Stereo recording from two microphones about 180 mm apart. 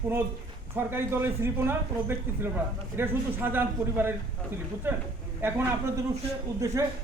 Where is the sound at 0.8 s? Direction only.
10° right (ahead or behind).